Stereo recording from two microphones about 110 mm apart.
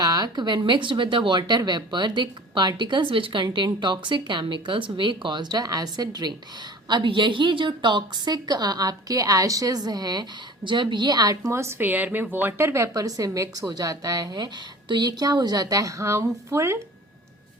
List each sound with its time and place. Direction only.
0.0 s a woman's voice: 40° right (ahead or behind)